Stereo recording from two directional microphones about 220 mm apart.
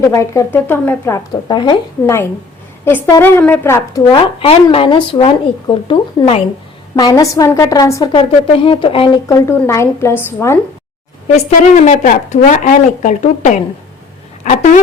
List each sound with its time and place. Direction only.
0.0 s speech: 10° left (ahead or behind)
4.1 s speech: 25° left (ahead or behind)
9.3 s speech: 10° left (ahead or behind)
11.9 s speech: 35° left (ahead or behind)